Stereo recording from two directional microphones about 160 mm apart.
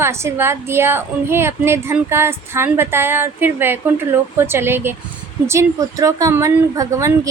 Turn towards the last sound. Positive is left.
turn(degrees=-20)  # may be behind; listen again after turning